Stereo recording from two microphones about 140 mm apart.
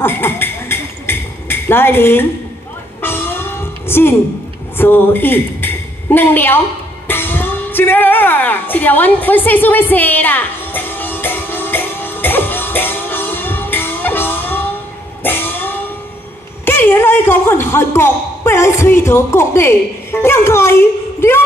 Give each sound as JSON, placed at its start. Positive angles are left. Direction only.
{"t": 0.0, "sound": "a sound", "side_deg": 15}
{"t": 3.0, "sound": "music", "side_deg": 15}
{"t": 4.7, "sound": "a woman's voice", "side_deg": 15}
{"t": 7.1, "sound": "music", "side_deg": 15}
{"t": 16.6, "sound": "speech", "side_deg": 15}